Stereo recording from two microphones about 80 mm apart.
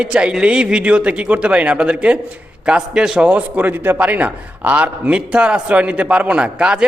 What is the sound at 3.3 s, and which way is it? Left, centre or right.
A man's voice, centre.